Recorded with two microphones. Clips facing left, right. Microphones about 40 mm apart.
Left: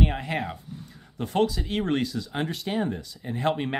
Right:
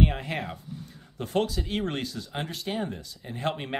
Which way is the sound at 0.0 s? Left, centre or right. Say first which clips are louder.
Left 1 dB; centre.